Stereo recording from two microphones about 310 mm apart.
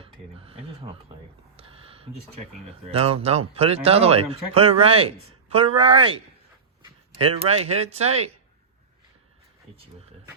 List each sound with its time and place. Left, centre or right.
0.0 s speech: centre
1.5 s a sound: centre
3.2 s a man's voice: centre
7.2 s a man's voice: centre